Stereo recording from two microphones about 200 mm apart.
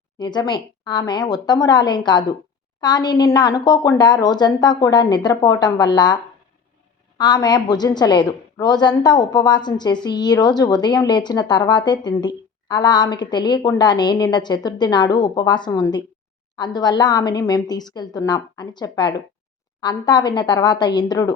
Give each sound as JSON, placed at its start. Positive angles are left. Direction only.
{"t": 0.2, "sound": "a woman's voice", "side_deg": 20}
{"t": 7.2, "sound": "a woman's voice", "side_deg": 20}